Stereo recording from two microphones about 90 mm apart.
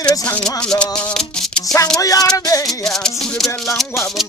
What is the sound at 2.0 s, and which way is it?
Music, 40° left (ahead or behind).